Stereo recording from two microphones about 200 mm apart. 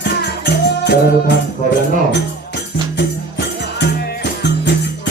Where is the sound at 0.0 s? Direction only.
55° left (ahead or behind).